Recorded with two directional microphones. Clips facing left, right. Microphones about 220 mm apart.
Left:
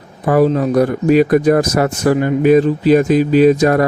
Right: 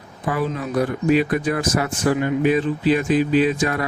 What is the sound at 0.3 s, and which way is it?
Speech, 40° left (ahead or behind).